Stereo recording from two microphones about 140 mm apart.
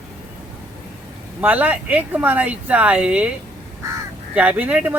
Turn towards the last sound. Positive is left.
turn(degrees=-10)  # may be behind; listen again after turning